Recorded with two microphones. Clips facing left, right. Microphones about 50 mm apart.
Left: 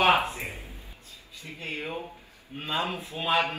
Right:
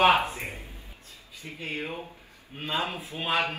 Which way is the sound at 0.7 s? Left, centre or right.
Right.